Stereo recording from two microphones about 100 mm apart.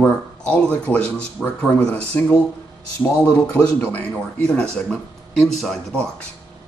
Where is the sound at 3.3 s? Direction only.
15° left (ahead or behind).